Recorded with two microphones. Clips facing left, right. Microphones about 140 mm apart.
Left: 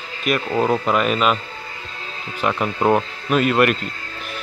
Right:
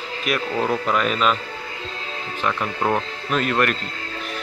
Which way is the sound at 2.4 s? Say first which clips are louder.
Left 4 dB; 15° left (ahead or behind).